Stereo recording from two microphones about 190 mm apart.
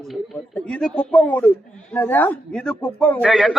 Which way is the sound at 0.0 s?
5° left (ahead or behind).